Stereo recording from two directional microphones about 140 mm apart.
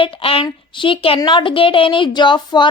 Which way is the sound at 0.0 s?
40° left (ahead or behind).